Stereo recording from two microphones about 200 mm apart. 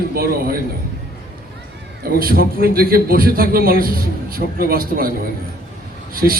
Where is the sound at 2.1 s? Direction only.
45° right (ahead or behind).